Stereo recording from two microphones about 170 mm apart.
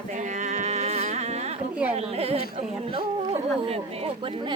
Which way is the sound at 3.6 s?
35° right (ahead or behind).